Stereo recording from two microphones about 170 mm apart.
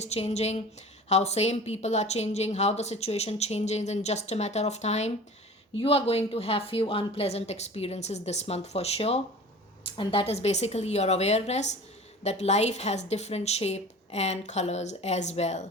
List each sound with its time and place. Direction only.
0.0 s a woman's voice: 40° left (ahead or behind)